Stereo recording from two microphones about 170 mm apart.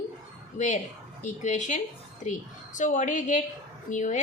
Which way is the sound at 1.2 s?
45° left (ahead or behind).